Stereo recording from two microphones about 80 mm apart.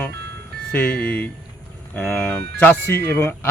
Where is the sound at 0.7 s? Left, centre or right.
Centre.